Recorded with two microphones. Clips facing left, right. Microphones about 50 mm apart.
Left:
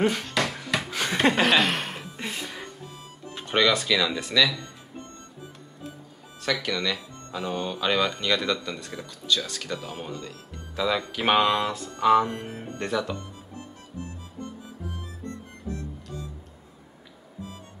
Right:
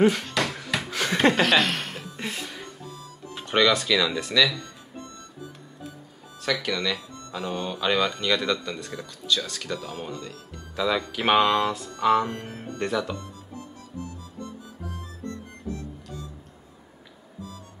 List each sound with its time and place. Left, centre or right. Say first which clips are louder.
0.0 s a sound: right 3 dB; centre
2.1 s music: right 2 dB; centre
3.3 s speech: right 1 dB; centre
6.4 s speech: even; centre
12.4 s speech: left 1 dB; centre
12.7 s speech: right 1 dB; centre